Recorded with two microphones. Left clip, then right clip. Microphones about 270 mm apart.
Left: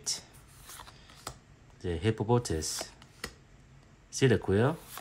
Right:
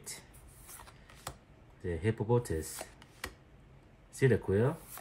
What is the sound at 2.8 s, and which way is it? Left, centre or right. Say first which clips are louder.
Computer keyboard: left 3 dB; centre.